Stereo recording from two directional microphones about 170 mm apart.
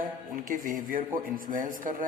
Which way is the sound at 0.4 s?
55° right (ahead or behind).